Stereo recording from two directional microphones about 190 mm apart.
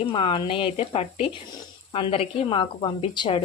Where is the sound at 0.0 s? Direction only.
25° left (ahead or behind).